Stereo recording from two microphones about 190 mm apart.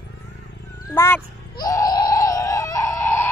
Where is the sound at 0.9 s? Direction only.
15° left (ahead or behind).